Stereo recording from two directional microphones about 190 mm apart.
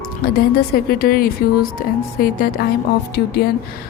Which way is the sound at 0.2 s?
50° left (ahead or behind).